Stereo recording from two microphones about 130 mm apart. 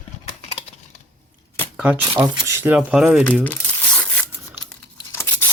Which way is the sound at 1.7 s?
10° right (ahead or behind).